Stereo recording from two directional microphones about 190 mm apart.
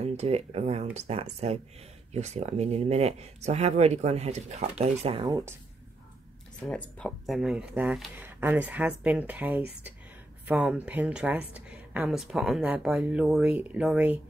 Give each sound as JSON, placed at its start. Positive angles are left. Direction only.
{"t": 0.0, "sound": "speech", "side_deg": -35}
{"t": 6.6, "sound": "speech", "side_deg": 5}